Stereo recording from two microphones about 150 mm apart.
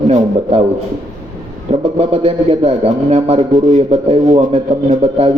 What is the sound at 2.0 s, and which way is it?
A man's voice, 45° right (ahead or behind).